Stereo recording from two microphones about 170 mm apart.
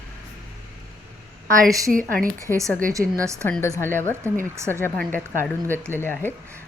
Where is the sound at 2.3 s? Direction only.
15° right (ahead or behind).